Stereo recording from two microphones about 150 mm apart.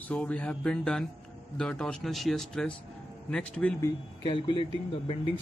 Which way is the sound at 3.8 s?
30° left (ahead or behind).